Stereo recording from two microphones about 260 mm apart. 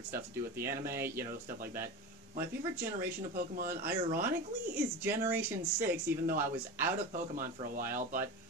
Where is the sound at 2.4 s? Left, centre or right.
Centre.